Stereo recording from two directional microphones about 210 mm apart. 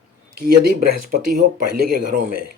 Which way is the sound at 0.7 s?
45° right (ahead or behind).